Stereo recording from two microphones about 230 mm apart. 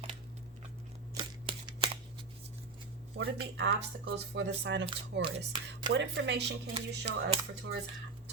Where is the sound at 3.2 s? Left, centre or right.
Right.